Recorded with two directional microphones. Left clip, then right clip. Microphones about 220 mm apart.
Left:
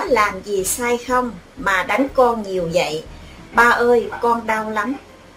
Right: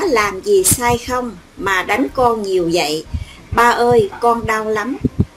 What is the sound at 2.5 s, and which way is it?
Speech, 40° right (ahead or behind).